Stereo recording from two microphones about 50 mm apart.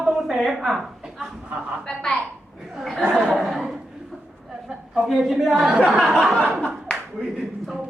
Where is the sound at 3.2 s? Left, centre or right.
Centre.